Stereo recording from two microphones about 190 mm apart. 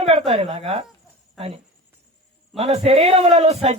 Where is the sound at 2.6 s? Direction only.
35° right (ahead or behind).